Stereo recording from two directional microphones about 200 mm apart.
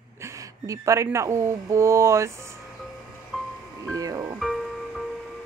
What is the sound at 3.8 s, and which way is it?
Speech, 15° right (ahead or behind).